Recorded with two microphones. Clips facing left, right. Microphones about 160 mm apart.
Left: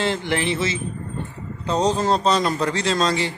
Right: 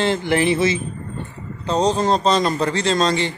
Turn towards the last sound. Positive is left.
turn(degrees=5)  # may be behind; listen again after turning